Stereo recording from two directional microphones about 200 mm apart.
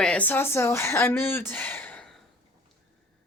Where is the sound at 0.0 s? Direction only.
5° left (ahead or behind).